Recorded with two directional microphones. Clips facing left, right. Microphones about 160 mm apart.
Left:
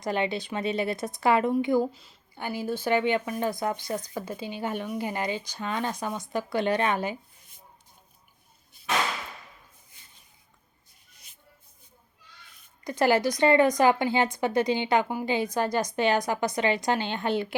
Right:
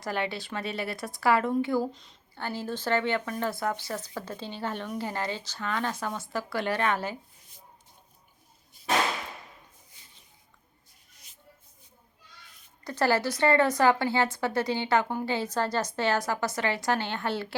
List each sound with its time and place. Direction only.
0.0 s speech: 20° left (ahead or behind)
1.9 s speech: 5° left (ahead or behind)
12.8 s speech: 15° left (ahead or behind)